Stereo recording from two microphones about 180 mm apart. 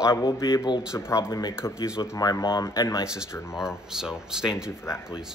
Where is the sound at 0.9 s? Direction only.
15° left (ahead or behind).